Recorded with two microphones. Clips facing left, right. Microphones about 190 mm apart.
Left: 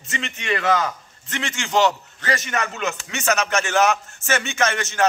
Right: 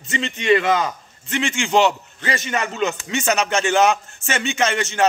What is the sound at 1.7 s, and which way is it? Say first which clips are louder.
Speech: right 1 dB; 25° right (ahead or behind).